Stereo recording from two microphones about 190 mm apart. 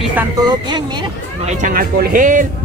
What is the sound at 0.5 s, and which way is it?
Speech, 25° right (ahead or behind).